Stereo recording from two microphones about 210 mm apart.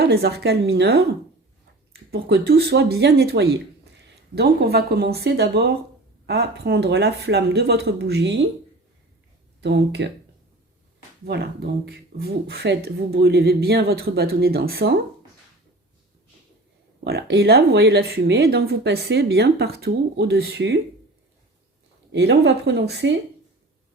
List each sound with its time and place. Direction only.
0.0 s speech: 50° right (ahead or behind)
9.6 s speech: 55° right (ahead or behind)
11.3 s speech: 50° right (ahead or behind)
17.0 s speech: 50° right (ahead or behind)
22.1 s speech: 55° right (ahead or behind)